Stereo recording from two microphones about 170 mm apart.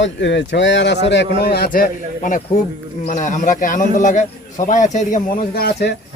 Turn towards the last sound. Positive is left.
turn(degrees=70)  # may be behind; listen again after turning